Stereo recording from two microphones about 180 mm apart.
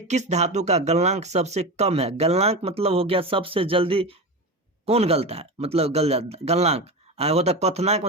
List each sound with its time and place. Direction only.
0.1 s speech: 40° right (ahead or behind)